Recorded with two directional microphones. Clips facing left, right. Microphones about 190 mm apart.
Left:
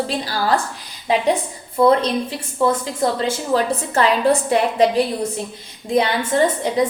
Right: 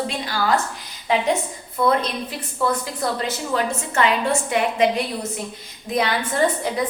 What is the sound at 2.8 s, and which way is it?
A woman's voice, 25° left (ahead or behind).